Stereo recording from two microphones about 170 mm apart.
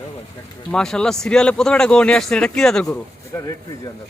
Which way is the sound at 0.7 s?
5° left (ahead or behind).